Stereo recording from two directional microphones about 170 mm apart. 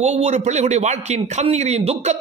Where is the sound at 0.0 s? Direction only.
40° right (ahead or behind).